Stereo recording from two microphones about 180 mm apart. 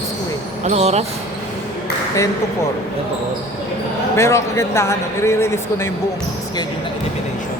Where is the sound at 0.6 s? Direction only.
35° right (ahead or behind).